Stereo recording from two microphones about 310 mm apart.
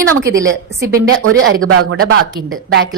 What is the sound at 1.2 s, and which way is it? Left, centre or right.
Speech, right.